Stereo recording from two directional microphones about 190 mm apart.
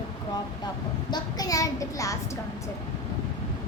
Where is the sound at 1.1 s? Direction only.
20° left (ahead or behind).